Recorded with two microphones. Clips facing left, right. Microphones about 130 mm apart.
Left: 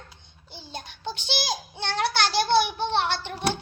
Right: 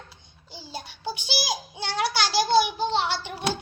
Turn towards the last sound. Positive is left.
turn(degrees=-10)  # may be behind; listen again after turning